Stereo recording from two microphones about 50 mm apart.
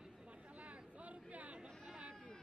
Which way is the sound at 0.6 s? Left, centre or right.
Right.